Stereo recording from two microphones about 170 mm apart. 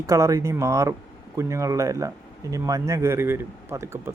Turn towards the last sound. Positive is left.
turn(degrees=-15)  # may be behind; listen again after turning